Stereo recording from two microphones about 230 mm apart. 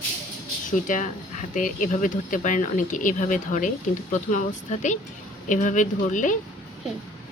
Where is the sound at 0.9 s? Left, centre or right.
Left.